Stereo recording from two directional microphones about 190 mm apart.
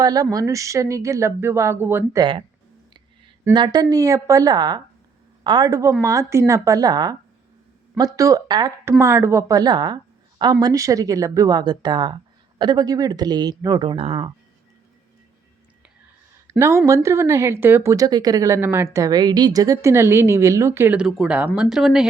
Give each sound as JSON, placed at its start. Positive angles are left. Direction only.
{"t": 0.0, "sound": "speech", "side_deg": -20}
{"t": 3.5, "sound": "speech", "side_deg": -20}
{"t": 16.5, "sound": "speech", "side_deg": -15}